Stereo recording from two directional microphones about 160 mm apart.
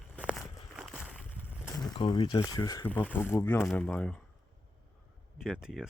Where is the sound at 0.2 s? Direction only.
5° right (ahead or behind).